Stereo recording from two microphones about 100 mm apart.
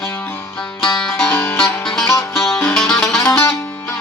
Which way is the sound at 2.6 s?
10° left (ahead or behind).